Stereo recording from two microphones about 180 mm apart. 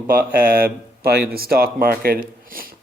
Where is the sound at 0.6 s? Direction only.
60° right (ahead or behind).